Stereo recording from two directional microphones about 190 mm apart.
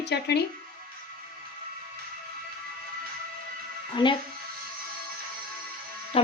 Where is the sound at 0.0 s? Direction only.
60° left (ahead or behind).